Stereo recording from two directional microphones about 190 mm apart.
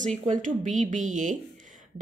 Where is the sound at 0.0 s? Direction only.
40° right (ahead or behind).